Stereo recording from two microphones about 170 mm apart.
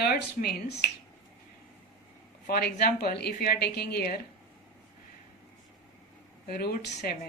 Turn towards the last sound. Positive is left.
turn(degrees=60)  # may be behind; listen again after turning